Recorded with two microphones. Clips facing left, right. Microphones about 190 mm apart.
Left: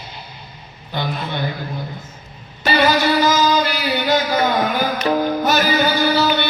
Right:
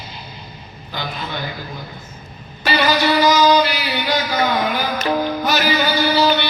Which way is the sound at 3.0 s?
50° left (ahead or behind).